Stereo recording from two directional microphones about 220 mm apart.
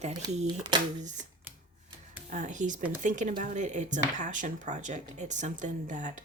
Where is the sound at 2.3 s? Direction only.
35° right (ahead or behind).